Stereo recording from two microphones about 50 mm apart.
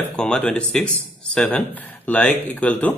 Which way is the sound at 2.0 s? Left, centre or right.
Left.